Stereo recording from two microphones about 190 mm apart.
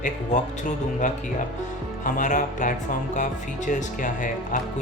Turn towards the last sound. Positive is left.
turn(degrees=40)  # may be behind; listen again after turning